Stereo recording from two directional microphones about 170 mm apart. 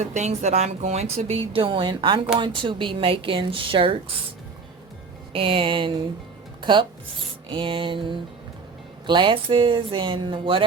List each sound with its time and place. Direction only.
0.0 s a woman's voice: 45° right (ahead or behind)
5.3 s a woman's voice: 30° right (ahead or behind)